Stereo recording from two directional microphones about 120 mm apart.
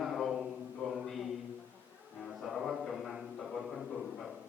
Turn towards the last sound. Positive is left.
turn(degrees=0)  # may be behind; listen again after turning